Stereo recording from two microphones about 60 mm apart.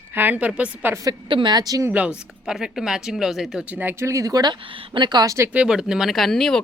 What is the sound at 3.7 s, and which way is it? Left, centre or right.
Speech, right.